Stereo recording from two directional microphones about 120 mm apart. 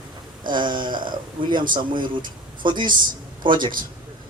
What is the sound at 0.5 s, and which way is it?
Speech, 40° right (ahead or behind).